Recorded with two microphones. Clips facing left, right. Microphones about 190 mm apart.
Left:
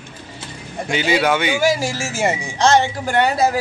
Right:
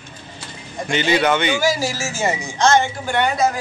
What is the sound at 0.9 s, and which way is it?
Speech, 5° left (ahead or behind).